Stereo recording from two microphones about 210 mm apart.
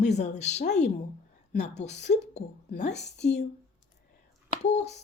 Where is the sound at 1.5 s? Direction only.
50° left (ahead or behind).